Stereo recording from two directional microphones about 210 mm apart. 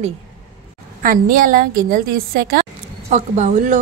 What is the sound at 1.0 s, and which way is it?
A woman's voice, 40° right (ahead or behind).